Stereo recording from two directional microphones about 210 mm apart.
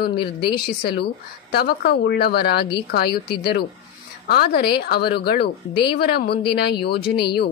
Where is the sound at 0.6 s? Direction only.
50° left (ahead or behind).